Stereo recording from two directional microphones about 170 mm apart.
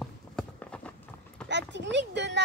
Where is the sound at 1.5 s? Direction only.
90° right.